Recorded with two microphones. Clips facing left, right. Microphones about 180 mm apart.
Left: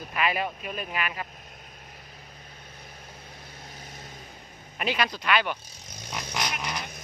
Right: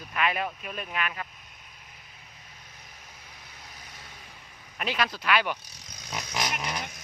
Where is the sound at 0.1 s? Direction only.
5° left (ahead or behind).